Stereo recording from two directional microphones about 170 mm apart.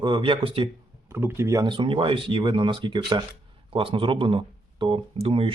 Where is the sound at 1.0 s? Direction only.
15° right (ahead or behind); by 5.5 s 35° right (ahead or behind).